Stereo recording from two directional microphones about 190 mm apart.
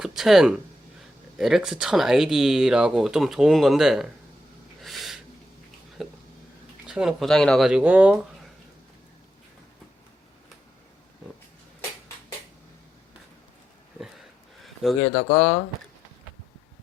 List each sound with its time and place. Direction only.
0.0 s speech: centre (ahead or behind)
4.8 s snort: centre (ahead or behind)
6.0 s a sound: centre (ahead or behind)
6.8 s speech: 5° right (ahead or behind)
15.0 s speech: 30° left (ahead or behind)